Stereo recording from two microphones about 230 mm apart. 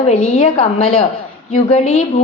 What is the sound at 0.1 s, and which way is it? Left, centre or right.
Speech, left.